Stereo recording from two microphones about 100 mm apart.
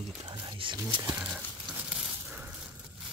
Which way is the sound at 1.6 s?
10° right (ahead or behind).